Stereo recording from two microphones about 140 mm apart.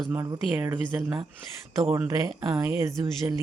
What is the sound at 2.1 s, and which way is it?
Speech, 20° right (ahead or behind).